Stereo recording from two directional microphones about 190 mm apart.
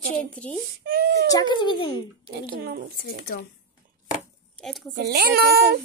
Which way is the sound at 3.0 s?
50° left (ahead or behind).